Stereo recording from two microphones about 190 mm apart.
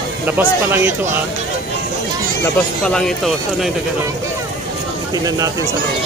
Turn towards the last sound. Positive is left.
turn(degrees=-20)  # may be behind; listen again after turning